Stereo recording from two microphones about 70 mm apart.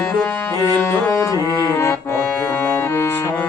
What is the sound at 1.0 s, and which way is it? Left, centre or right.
Music, left.